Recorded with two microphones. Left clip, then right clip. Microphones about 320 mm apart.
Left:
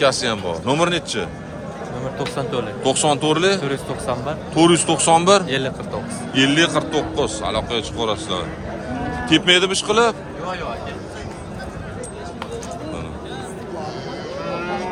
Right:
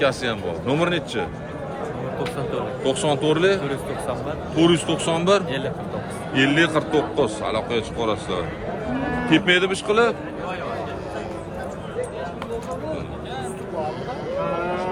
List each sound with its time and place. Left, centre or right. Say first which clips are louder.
0.0 s speech: left 4 dB; centre
2.8 s speech: left 3 dB; centre
3.6 s speech: left 2 dB; left
4.5 s speech: left 4 dB; centre
5.5 s speech: left 4 dB; left
6.3 s a man's voice: left 2 dB; centre